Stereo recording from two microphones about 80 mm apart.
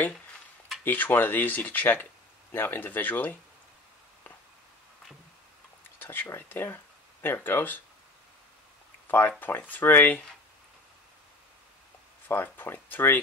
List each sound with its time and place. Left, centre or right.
0.8 s speech: left
5.9 s a sound: left
6.3 s speech: left
9.4 s speech: left
12.3 s speech: left